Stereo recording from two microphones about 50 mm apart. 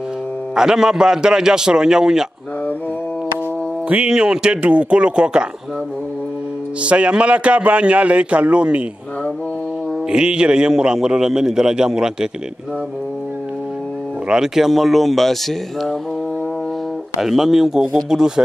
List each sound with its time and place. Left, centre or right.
0.6 s a man's voice: centre
4.1 s a man's voice: centre
6.8 s a man's voice: right
10.1 s a man's voice: centre
14.3 s speech: centre
17.2 s a man's voice: centre